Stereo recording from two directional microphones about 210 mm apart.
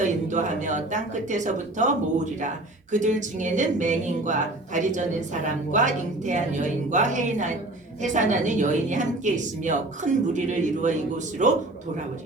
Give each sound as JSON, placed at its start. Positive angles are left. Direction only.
{"t": 0.0, "sound": "speech", "side_deg": -35}